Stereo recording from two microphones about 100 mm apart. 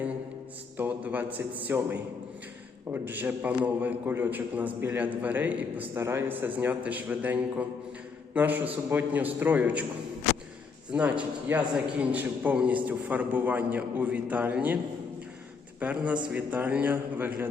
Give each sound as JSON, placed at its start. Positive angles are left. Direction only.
{"t": 0.8, "sound": "a man's voice", "side_deg": -15}
{"t": 10.9, "sound": "a man's voice", "side_deg": -15}
{"t": 15.8, "sound": "a man's voice", "side_deg": -15}